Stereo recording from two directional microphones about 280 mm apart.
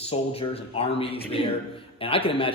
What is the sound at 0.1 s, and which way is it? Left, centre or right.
Speech, left.